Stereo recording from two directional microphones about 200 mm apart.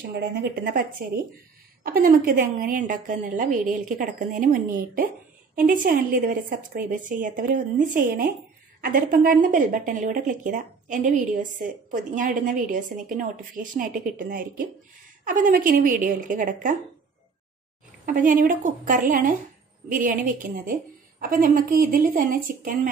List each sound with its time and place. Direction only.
0.4 s a woman's voice: 45° right (ahead or behind)
18.0 s a woman's voice: 40° right (ahead or behind)